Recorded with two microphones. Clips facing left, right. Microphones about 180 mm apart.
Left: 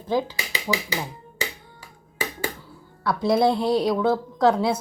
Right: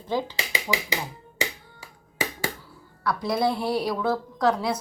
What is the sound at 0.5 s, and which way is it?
Speech, 15° right (ahead or behind).